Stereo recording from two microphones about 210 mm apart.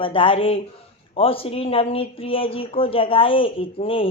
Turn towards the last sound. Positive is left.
turn(degrees=25)  # may be behind; listen again after turning